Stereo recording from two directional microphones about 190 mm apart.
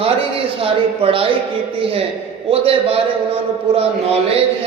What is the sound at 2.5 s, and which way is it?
Speech, 30° right (ahead or behind).